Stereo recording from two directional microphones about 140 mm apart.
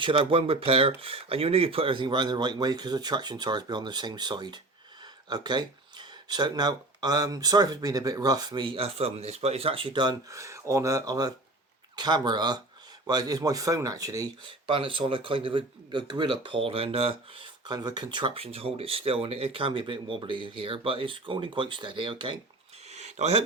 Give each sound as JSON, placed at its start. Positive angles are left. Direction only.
{"t": 0.0, "sound": "speech", "side_deg": -40}
{"t": 14.7, "sound": "speech", "side_deg": -35}
{"t": 22.9, "sound": "a sound", "side_deg": -55}